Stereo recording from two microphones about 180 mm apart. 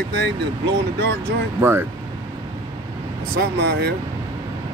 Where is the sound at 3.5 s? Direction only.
70° right (ahead or behind).